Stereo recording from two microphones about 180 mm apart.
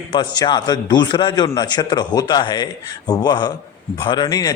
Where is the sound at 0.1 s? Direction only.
25° left (ahead or behind).